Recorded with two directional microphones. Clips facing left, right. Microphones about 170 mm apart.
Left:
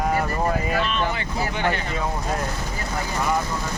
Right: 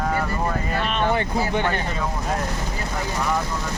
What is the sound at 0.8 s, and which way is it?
Speech, 55° right (ahead or behind).